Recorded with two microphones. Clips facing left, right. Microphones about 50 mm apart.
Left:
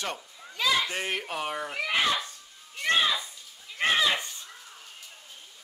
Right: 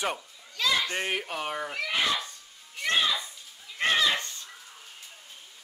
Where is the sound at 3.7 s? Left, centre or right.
Centre.